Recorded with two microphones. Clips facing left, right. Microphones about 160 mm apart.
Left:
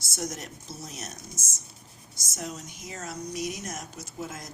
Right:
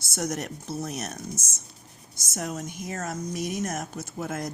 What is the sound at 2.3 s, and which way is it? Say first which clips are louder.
Speech: right 5 dB; 55° right (ahead or behind).